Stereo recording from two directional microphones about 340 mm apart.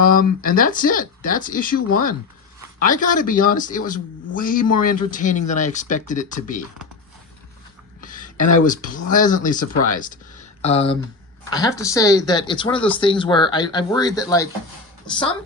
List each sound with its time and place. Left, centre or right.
0.0 s speech: left
8.0 s speech: left